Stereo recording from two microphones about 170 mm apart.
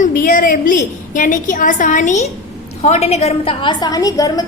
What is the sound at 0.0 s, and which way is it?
A woman's voice, 55° left (ahead or behind).